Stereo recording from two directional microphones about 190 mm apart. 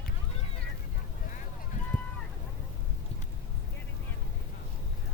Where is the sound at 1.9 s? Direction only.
45° left (ahead or behind).